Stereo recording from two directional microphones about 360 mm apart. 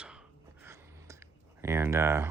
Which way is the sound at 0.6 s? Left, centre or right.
Centre.